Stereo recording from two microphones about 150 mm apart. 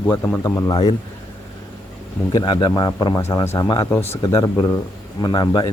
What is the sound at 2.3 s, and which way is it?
Speech, 30° left (ahead or behind).